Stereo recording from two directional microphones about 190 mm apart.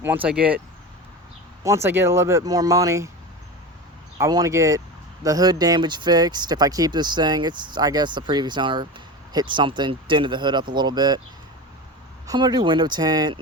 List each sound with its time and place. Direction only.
0.0 s speech: 10° right (ahead or behind)
1.6 s speech: 15° right (ahead or behind)
4.2 s speech: 15° right (ahead or behind)
12.3 s speech: 20° right (ahead or behind)